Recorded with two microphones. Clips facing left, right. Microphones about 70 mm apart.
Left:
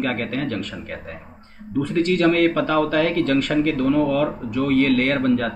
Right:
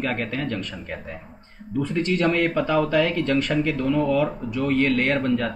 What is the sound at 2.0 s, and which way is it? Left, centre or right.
Speech, left.